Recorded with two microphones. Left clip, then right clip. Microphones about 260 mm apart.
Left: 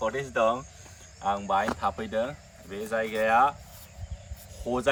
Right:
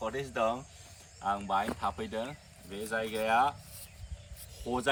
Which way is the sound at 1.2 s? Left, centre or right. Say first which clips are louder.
Left 5 dB; centre.